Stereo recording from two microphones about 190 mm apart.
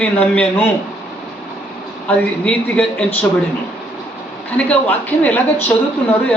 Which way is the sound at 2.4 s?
5° left (ahead or behind).